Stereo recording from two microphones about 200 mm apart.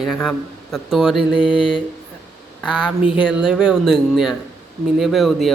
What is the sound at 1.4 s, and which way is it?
Mantra, 25° left (ahead or behind).